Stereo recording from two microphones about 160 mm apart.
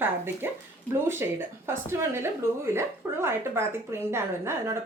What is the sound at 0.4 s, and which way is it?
A woman's voice, 15° right (ahead or behind).